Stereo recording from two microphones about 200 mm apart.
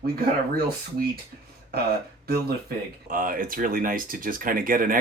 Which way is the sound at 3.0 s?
45° right (ahead or behind).